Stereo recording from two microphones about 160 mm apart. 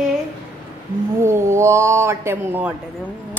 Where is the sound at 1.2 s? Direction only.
15° right (ahead or behind).